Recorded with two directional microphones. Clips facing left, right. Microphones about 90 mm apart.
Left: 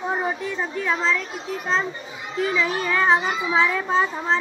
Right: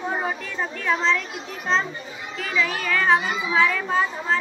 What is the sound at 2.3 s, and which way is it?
A child's voice, 25° left (ahead or behind).